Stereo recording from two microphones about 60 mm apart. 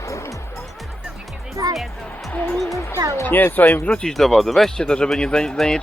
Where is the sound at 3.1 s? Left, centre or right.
Left.